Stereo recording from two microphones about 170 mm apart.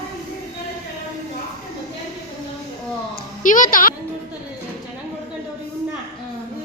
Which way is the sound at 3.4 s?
50° left (ahead or behind).